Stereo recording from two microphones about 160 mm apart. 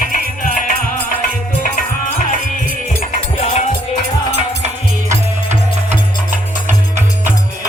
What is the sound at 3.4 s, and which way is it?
Music, 45° left (ahead or behind).